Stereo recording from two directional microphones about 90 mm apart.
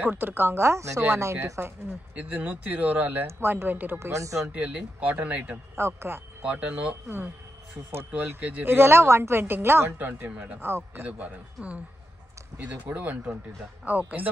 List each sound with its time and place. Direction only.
0.0 s speech: 20° right (ahead or behind)
2.1 s speech: 15° right (ahead or behind)
4.0 s speech: 35° right (ahead or behind)
4.6 s speech: 15° right (ahead or behind)
5.8 s speech: 30° right (ahead or behind)
6.4 s speech: 15° right (ahead or behind)